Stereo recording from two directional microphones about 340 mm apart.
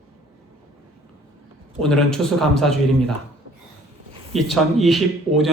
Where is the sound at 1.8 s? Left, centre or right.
Centre.